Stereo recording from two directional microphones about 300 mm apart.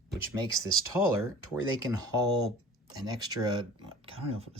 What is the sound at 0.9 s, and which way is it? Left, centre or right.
Speech, centre.